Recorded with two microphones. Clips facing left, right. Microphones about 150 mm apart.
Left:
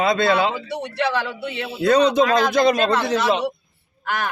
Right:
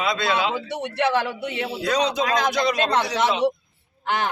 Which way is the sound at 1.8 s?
55° left (ahead or behind).